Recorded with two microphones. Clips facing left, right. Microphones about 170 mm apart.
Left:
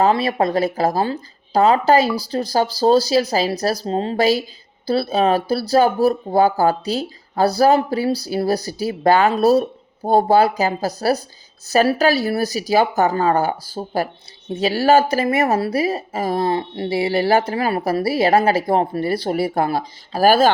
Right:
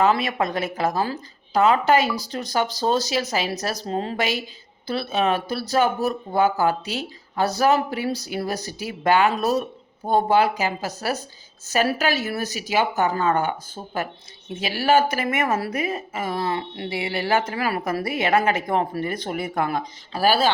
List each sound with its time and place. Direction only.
0.0 s speech: 35° left (ahead or behind)